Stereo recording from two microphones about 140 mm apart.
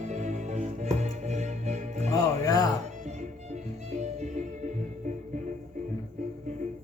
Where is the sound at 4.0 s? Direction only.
55° right (ahead or behind).